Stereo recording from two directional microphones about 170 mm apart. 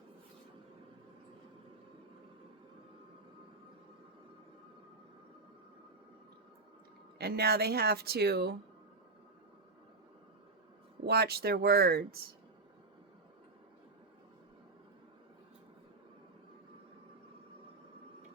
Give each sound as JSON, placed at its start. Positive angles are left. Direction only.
{"t": 7.2, "sound": "speech", "side_deg": -70}
{"t": 11.0, "sound": "speech", "side_deg": -70}